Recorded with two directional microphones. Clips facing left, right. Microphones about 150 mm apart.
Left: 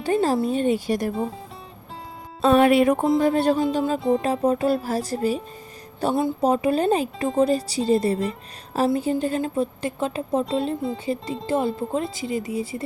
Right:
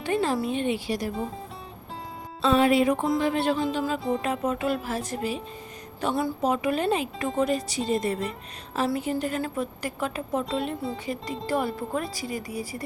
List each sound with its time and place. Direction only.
0.0 s a woman's voice: 35° left (ahead or behind)
2.4 s speech: 55° left (ahead or behind)
3.2 s a woman's voice: 40° left (ahead or behind); by 12.8 s 25° left (ahead or behind)